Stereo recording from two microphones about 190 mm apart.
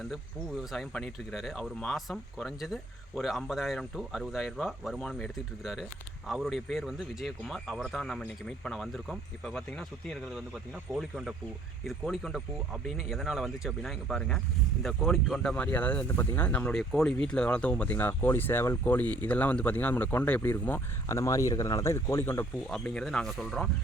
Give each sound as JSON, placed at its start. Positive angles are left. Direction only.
{"t": 0.1, "sound": "speech", "side_deg": 0}